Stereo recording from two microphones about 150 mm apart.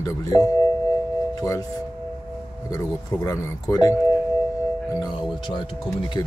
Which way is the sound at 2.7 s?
25° left (ahead or behind).